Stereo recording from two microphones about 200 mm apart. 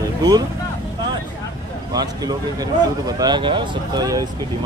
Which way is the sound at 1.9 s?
20° right (ahead or behind).